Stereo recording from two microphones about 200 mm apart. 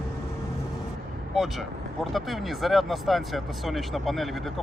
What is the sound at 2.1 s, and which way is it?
Speech, centre (ahead or behind).